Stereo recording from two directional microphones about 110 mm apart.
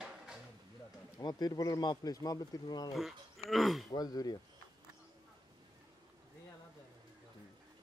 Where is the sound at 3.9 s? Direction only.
35° left (ahead or behind).